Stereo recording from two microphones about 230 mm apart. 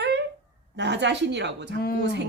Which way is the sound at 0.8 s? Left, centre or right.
Right.